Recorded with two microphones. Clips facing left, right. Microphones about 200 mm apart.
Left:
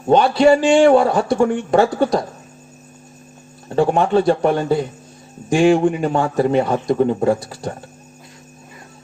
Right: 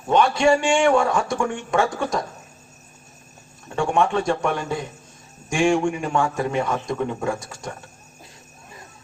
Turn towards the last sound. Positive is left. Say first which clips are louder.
# left 9 dB
turn(degrees=35)  # may be behind; listen again after turning